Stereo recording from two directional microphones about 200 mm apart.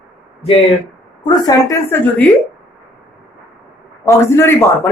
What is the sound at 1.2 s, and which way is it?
Speech, 20° left (ahead or behind).